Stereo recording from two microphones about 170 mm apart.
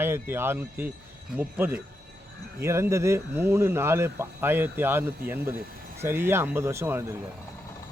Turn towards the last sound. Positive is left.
turn(degrees=-15)  # may be behind; listen again after turning